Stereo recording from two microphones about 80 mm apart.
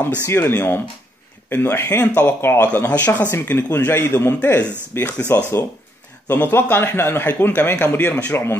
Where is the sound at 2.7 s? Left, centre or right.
Centre.